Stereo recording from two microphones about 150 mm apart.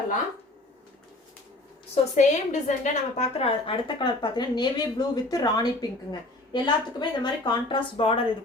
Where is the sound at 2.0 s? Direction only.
40° left (ahead or behind).